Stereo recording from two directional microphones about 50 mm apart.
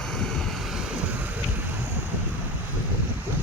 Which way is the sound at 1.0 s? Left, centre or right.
Right.